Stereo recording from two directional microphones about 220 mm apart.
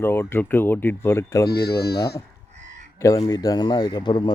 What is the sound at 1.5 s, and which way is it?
Speech, 45° left (ahead or behind).